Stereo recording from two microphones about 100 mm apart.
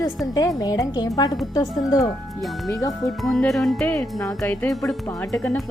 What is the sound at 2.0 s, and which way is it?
Speech, centre (ahead or behind).